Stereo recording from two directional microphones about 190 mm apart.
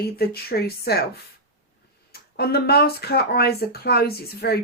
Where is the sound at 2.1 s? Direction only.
55° left (ahead or behind).